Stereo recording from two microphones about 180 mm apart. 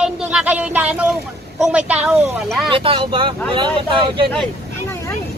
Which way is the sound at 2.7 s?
30° right (ahead or behind).